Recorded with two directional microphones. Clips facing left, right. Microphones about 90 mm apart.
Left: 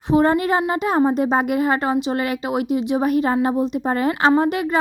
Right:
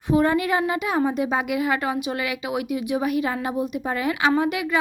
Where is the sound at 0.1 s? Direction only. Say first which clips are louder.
Left 3 dB; 30° left (ahead or behind).